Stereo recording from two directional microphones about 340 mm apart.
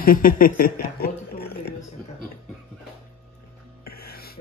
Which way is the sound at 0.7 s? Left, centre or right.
Left.